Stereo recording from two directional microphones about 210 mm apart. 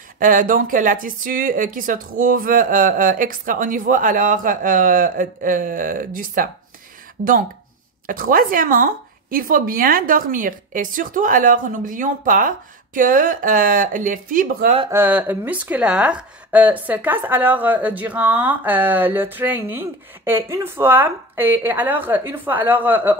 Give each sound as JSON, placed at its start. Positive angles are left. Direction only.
{"t": 0.2, "sound": "speech", "side_deg": -40}
{"t": 8.1, "sound": "speech", "side_deg": -45}
{"t": 14.8, "sound": "speech", "side_deg": -10}